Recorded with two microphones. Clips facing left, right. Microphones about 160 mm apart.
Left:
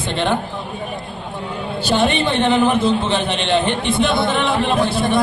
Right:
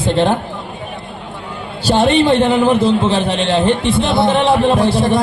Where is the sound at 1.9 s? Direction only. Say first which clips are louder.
Right 6 dB; 35° right (ahead or behind).